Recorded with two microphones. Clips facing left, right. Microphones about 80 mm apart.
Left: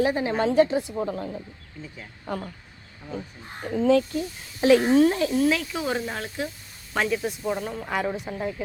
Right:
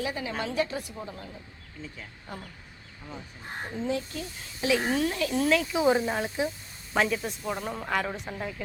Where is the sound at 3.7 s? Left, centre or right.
Left.